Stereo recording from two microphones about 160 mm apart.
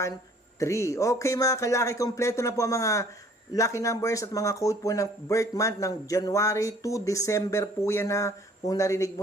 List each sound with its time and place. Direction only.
0.6 s speech: 20° left (ahead or behind)